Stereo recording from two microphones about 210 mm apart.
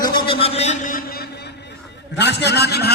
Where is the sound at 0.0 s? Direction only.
25° left (ahead or behind); by 1.3 s 45° left (ahead or behind).